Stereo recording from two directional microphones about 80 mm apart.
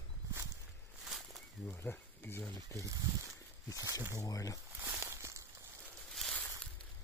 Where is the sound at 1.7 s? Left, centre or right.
Left.